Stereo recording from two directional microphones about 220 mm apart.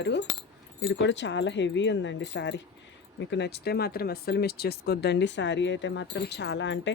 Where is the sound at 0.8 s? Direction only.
55° left (ahead or behind).